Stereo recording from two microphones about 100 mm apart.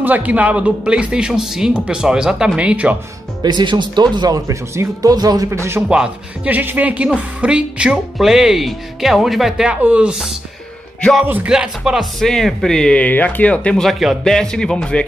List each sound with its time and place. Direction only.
0.0 s speech: 15° right (ahead or behind)
3.4 s speech: 45° right (ahead or behind)
5.5 s speech: 25° right (ahead or behind)
5.9 s speech: 10° right (ahead or behind)
11.2 s speech: 20° right (ahead or behind)
11.5 s speech: 5° right (ahead or behind); by 13.8 s 10° left (ahead or behind)
13.8 s speech: centre (ahead or behind)